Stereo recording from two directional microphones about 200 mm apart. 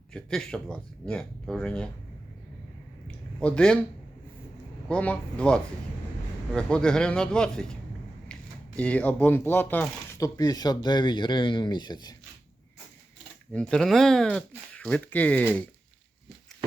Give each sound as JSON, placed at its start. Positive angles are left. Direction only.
{"t": 0.1, "sound": "speech", "side_deg": 5}
{"t": 3.1, "sound": "a sound", "side_deg": 5}
{"t": 4.9, "sound": "speech", "side_deg": 5}
{"t": 13.5, "sound": "speech", "side_deg": 5}